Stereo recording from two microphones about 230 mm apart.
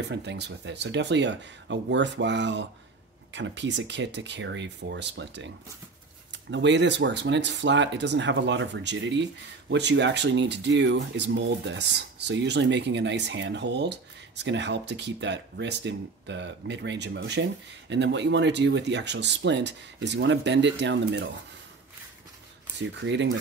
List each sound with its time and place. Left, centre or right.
0.1 s speech: right
22.8 s speech: right